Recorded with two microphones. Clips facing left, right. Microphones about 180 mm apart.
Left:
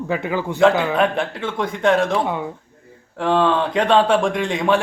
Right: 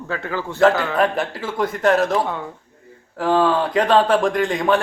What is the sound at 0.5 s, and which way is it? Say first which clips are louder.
A man's voice: even; centre (ahead or behind).